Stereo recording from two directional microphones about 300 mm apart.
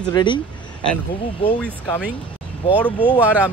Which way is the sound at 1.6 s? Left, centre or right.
Centre.